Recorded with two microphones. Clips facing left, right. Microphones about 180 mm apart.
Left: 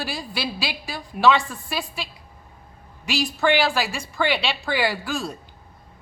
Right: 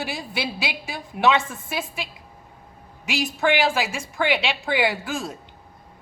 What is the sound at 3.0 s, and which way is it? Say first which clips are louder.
A woman's voice: left 1 dB; 20° right (ahead or behind).